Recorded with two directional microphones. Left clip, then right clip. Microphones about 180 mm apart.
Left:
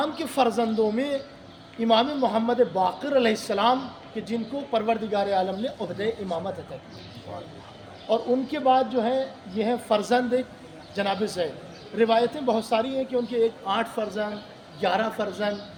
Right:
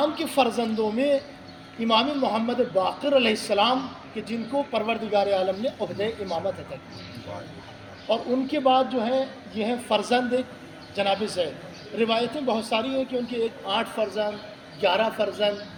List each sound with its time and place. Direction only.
0.3 s speech: 20° left (ahead or behind)
8.1 s speech: 20° left (ahead or behind)